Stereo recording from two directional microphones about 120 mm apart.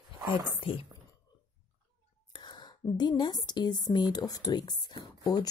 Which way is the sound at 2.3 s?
35° left (ahead or behind).